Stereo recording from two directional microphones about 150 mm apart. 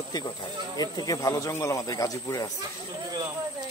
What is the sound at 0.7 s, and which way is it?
A man's voice, 25° left (ahead or behind).